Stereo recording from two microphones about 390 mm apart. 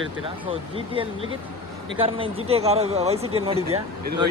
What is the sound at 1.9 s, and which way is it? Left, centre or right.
Speech, centre.